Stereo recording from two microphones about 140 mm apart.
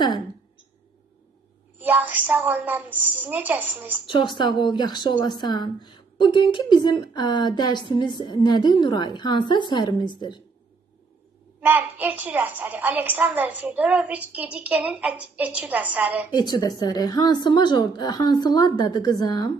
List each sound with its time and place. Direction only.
1.8 s a woman's voice: 10° right (ahead or behind)
4.0 s a woman's voice: 35° left (ahead or behind)
11.6 s a woman's voice: 15° right (ahead or behind)
16.3 s a woman's voice: 30° left (ahead or behind)